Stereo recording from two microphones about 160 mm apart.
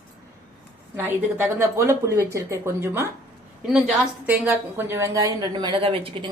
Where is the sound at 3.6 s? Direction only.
5° right (ahead or behind).